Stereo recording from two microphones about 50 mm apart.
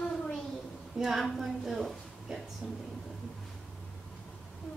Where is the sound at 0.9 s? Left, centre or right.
Centre.